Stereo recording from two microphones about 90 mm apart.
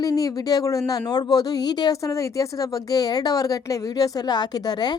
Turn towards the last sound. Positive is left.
turn(degrees=50)  # may be behind; listen again after turning